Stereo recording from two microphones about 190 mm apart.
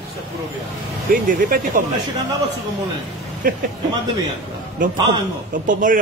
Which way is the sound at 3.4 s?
50° right (ahead or behind).